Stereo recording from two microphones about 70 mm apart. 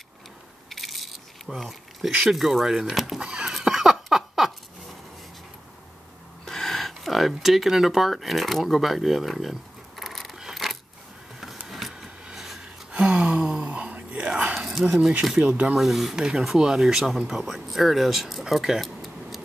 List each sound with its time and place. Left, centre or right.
0.7 s speech: centre
3.2 s a sound: centre
6.4 s a sound: centre
12.9 s whispering: centre
14.9 s speech: centre
15.7 s speech: centre